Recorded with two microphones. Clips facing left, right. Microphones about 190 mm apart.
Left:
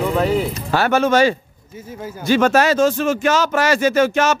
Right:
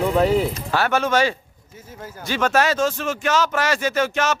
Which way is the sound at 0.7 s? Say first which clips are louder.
Left 5 dB; centre (ahead or behind).